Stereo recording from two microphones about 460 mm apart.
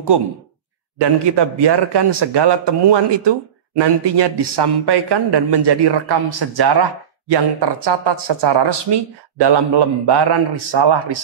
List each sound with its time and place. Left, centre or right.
0.9 s a man's voice: right